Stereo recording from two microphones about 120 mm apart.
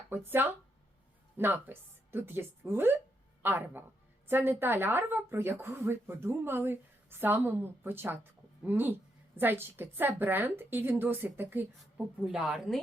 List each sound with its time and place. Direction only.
0.3 s speech: 15° right (ahead or behind)
12.2 s a woman's voice: 5° right (ahead or behind)